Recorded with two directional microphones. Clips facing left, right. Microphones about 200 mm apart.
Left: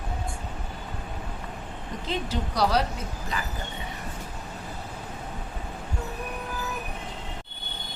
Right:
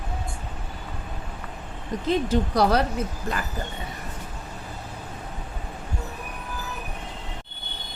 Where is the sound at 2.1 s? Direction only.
50° right (ahead or behind).